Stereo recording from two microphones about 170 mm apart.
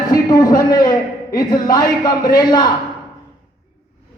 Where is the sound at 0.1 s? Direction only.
20° left (ahead or behind).